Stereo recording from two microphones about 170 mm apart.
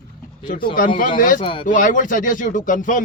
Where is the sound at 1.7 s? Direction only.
50° left (ahead or behind).